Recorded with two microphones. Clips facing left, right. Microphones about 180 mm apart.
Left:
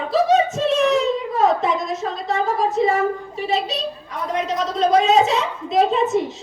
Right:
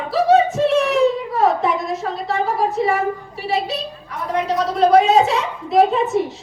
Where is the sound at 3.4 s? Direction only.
20° left (ahead or behind).